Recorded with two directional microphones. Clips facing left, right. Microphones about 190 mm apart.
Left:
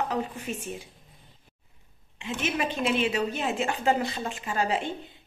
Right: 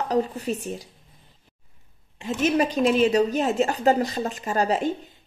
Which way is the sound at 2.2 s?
40° right (ahead or behind).